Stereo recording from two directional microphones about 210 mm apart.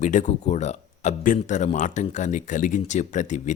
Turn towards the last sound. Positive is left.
turn(degrees=35)  # may be behind; listen again after turning